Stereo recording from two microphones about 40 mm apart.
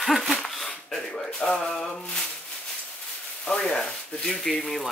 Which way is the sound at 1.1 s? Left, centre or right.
Left.